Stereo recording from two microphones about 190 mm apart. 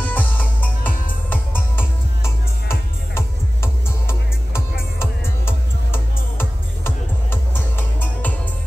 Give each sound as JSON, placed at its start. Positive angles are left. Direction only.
{"t": 0.0, "sound": "music", "side_deg": 10}